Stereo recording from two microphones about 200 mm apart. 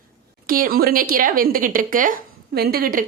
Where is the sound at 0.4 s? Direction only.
45° right (ahead or behind).